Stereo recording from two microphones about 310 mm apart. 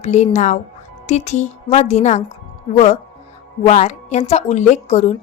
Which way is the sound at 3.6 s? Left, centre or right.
Left.